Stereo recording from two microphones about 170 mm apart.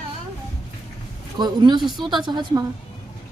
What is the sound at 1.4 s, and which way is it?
A woman's voice, 25° right (ahead or behind).